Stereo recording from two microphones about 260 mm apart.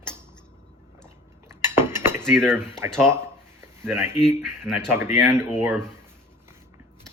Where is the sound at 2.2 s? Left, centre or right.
Centre.